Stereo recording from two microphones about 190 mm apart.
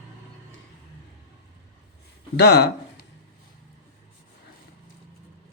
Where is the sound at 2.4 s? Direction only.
60° left (ahead or behind).